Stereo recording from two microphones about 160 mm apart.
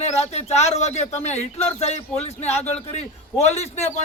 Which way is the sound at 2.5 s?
15° left (ahead or behind).